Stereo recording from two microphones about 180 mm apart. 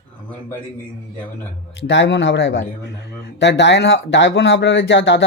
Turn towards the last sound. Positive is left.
turn(degrees=85)